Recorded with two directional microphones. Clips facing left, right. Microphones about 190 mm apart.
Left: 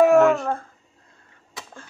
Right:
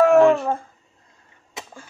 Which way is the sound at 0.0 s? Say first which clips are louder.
Right 1 dB; centre (ahead or behind).